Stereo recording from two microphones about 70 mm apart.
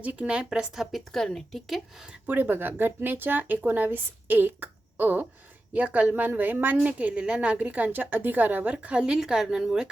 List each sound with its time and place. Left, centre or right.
0.0 s a woman's voice: centre
0.9 s speech: centre
2.2 s speech: right
6.8 s a woman's voice: centre